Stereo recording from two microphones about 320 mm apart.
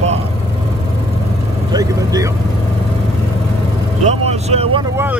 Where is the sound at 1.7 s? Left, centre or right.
Centre.